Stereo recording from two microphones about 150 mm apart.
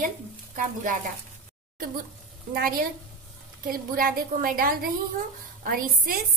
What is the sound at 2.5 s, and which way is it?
A woman's voice, 70° right (ahead or behind).